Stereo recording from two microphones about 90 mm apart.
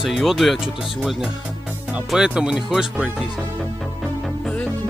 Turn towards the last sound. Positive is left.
turn(degrees=-5)  # may be behind; listen again after turning